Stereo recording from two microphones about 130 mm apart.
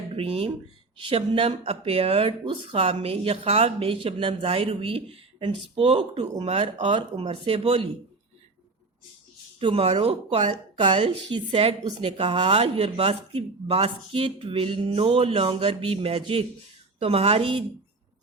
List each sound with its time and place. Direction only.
0.2 s speech: 50° right (ahead or behind); by 6.4 s 30° right (ahead or behind)
6.4 s speech: 50° right (ahead or behind)
9.6 s a woman's voice: 45° right (ahead or behind)